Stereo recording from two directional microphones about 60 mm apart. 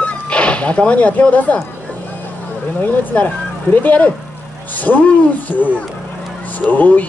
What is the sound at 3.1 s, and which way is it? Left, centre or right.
Speech, left.